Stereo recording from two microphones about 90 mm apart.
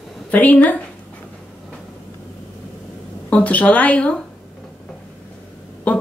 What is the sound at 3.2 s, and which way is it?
Speech, 15° left (ahead or behind).